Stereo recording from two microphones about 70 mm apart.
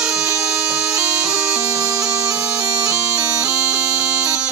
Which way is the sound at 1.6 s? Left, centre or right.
Right.